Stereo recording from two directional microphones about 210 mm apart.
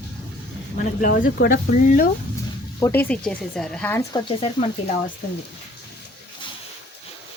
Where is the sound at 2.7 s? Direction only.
10° left (ahead or behind).